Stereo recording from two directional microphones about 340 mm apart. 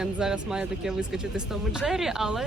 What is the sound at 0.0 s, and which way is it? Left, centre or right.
Speech, centre.